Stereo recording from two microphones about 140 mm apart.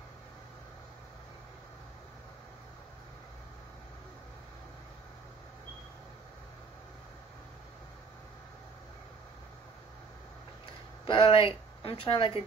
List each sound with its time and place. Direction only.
11.1 s speech: 40° left (ahead or behind)